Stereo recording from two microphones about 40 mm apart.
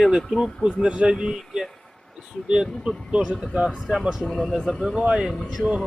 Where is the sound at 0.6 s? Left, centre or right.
Centre.